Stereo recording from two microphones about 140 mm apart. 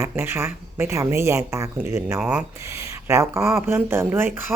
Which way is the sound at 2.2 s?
5° right (ahead or behind).